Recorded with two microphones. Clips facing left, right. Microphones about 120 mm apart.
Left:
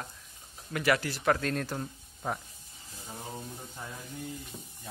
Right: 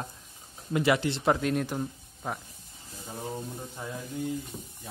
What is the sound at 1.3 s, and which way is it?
Speech, 15° right (ahead or behind).